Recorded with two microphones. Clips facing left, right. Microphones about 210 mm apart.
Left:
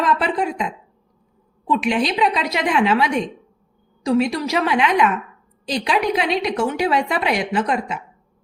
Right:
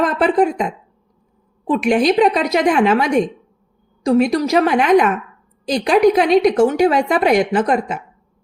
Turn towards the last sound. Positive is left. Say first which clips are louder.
# right 4 dB
turn(degrees=-50)  # may be behind; listen again after turning